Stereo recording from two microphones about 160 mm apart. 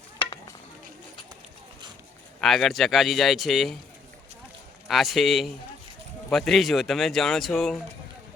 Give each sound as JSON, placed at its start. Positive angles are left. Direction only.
{"t": 0.2, "sound": "stir", "side_deg": 30}
{"t": 2.4, "sound": "speech", "side_deg": 0}
{"t": 4.9, "sound": "speech", "side_deg": 0}